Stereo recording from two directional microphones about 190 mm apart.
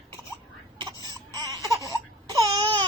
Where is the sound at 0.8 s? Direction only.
20° right (ahead or behind).